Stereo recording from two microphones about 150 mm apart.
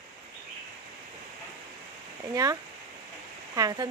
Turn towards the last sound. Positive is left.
turn(degrees=-25)  # may be behind; listen again after turning